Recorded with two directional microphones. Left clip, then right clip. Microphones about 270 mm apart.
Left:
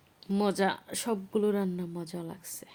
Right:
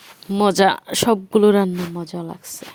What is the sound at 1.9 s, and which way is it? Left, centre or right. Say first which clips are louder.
Speech: right 10 dB; right.